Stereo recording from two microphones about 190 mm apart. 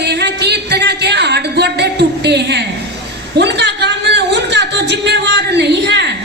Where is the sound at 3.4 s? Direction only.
65° right (ahead or behind).